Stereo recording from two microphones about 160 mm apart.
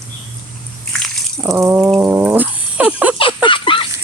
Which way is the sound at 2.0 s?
15° right (ahead or behind).